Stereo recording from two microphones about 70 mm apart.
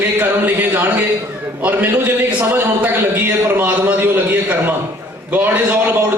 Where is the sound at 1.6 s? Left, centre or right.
Right.